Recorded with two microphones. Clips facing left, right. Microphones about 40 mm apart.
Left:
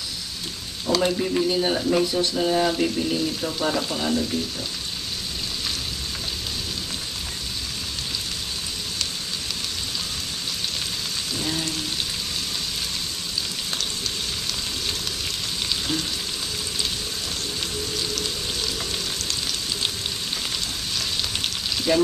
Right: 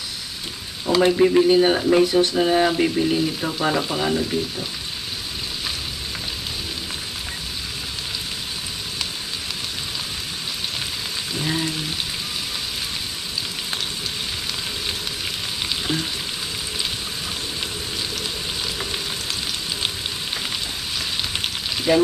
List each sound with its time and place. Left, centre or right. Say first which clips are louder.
0.8 s speech: right 4 dB; centre
1.1 s speech: right 8 dB; right
11.3 s frying: right 4 dB; centre
15.7 s frying: right 2 dB; centre
21.2 s frying: right 1 dB; centre